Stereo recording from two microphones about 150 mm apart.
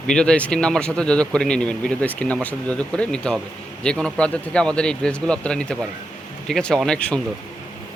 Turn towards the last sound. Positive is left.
turn(degrees=5)  # may be behind; listen again after turning